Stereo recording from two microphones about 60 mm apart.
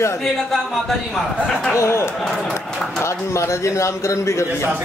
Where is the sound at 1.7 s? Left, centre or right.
Left.